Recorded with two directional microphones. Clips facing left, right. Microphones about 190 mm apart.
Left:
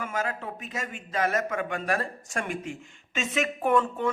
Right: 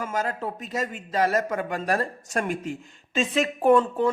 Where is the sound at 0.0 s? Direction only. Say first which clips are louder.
Right 3 dB; 35° right (ahead or behind).